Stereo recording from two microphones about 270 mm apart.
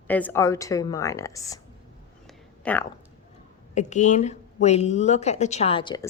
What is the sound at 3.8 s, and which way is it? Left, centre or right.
Speech, left.